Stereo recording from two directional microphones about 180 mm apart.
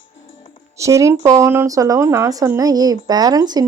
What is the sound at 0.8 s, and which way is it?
Speech, 15° right (ahead or behind).